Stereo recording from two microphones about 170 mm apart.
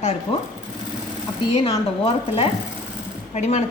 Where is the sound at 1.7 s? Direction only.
35° left (ahead or behind).